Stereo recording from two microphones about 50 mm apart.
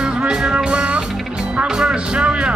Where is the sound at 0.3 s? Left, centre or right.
Centre.